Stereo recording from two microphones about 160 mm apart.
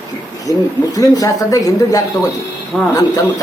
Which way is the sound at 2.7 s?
5° right (ahead or behind).